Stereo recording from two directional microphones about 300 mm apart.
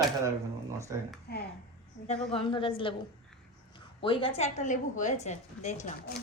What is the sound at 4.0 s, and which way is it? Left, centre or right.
A woman's voice, centre.